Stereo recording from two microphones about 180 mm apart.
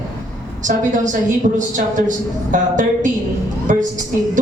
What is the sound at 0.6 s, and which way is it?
A woman's voice, 45° right (ahead or behind).